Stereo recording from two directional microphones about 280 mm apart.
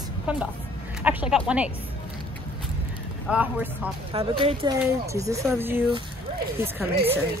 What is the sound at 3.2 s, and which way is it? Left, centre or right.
Speech, centre.